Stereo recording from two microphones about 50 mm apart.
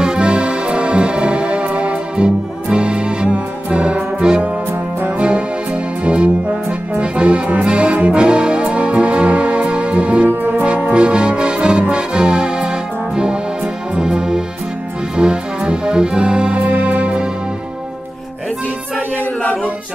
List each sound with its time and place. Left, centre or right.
0.0 s music: centre
6.0 s music: right
7.0 s brass instrument: right
10.6 s music: right